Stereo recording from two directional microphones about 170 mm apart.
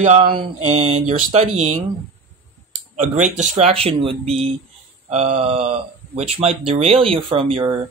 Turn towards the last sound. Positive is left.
turn(degrees=-30)  # may be behind; listen again after turning